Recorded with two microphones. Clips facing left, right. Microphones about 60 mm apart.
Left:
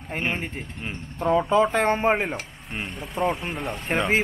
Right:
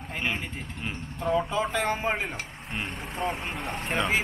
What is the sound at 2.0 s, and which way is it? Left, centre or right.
Speech, left.